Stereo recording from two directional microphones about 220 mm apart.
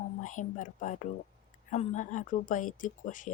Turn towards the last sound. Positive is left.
turn(degrees=35)  # may be behind; listen again after turning